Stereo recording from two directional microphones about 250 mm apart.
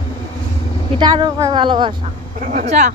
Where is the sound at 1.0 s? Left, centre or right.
Centre.